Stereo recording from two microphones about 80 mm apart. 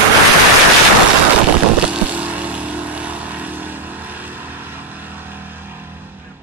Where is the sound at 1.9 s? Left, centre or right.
Centre.